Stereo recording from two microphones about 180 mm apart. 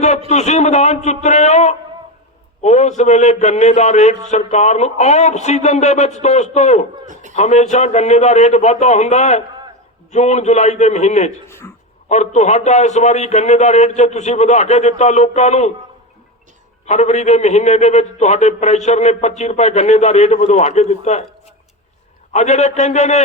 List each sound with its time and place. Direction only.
0.3 s a man's voice: 40° left (ahead or behind)
7.0 s a sound: 45° right (ahead or behind)
7.3 s a man's voice: 40° left (ahead or behind)
11.4 s speech: 15° left (ahead or behind)
12.0 s a man's voice: 40° left (ahead or behind)
16.8 s a man's voice: 40° left (ahead or behind)
22.3 s a man's voice: 40° left (ahead or behind)